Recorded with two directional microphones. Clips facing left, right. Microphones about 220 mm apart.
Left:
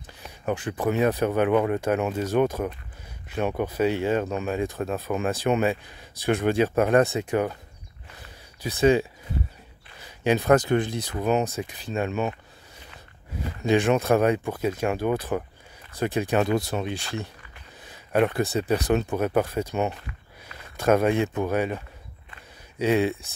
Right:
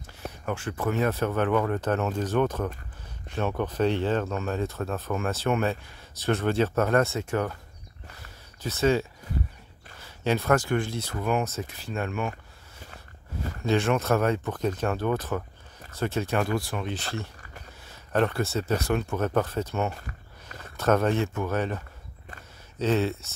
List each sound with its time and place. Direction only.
0.5 s speech: 15° left (ahead or behind)
8.6 s speech: 15° left (ahead or behind)
10.0 s speech: 15° left (ahead or behind)
13.7 s speech: 15° left (ahead or behind)